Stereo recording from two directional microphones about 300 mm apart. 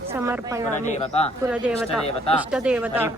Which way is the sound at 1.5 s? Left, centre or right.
Centre.